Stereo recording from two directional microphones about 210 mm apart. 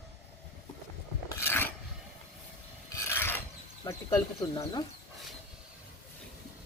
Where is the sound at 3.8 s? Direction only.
15° left (ahead or behind).